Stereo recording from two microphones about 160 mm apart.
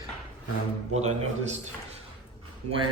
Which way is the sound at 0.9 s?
45° right (ahead or behind).